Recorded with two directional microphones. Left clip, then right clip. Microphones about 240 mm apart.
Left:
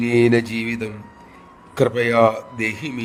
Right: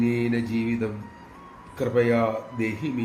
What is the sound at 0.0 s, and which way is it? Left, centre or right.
A man's voice, left.